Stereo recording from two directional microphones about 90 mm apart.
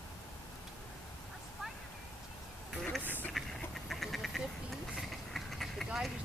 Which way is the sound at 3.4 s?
Centre (ahead or behind).